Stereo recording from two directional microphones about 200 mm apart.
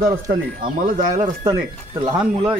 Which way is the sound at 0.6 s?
45° right (ahead or behind).